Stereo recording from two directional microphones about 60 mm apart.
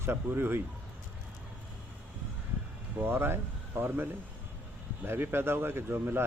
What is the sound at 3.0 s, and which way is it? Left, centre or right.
Speech, right.